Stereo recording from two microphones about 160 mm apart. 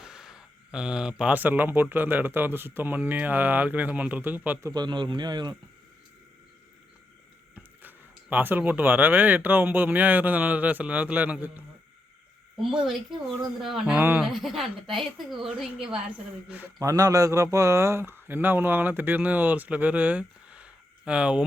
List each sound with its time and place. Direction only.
0.0 s a woman's voice: 5° right (ahead or behind)
4.7 s speech: 30° right (ahead or behind)
7.5 s a woman's voice: 10° right (ahead or behind)
14.3 s a woman's voice: centre (ahead or behind)